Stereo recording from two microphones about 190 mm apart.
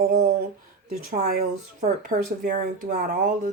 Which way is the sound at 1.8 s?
40° right (ahead or behind).